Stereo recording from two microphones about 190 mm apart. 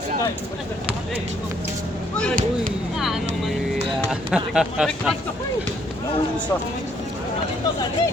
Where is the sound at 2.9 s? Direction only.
Centre (ahead or behind).